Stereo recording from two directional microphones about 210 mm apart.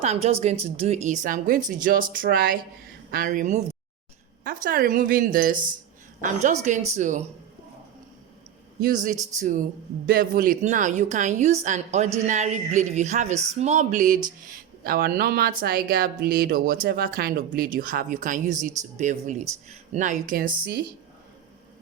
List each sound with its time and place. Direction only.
0.0 s a woman's voice: 30° right (ahead or behind)
8.8 s a woman's voice: 40° right (ahead or behind)